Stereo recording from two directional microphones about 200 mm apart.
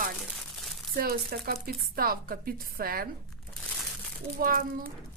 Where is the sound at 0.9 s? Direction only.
50° right (ahead or behind).